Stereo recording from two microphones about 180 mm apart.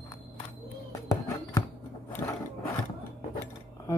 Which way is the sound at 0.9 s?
20° left (ahead or behind).